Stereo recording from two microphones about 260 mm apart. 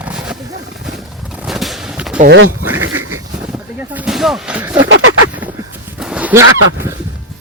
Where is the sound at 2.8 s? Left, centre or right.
Right.